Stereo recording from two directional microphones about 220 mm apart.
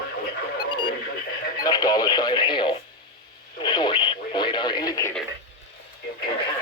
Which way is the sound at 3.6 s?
20° left (ahead or behind).